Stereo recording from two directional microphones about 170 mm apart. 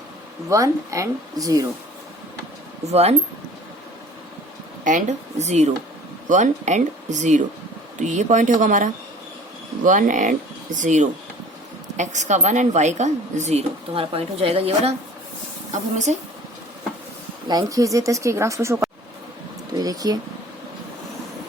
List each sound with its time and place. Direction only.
0.5 s speech: 20° right (ahead or behind)
2.8 s a woman's voice: 40° right (ahead or behind)
4.8 s a woman's voice: 50° right (ahead or behind)
17.5 s speech: 20° right (ahead or behind)